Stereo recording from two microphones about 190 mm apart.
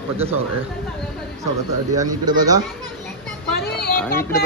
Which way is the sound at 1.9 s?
20° right (ahead or behind).